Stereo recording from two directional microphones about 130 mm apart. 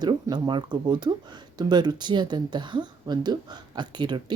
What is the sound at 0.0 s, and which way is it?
Speech, 30° right (ahead or behind).